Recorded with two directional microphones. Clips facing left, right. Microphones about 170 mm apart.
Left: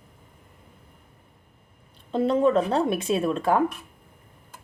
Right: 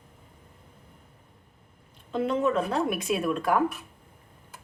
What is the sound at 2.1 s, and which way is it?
Speech, 35° left (ahead or behind).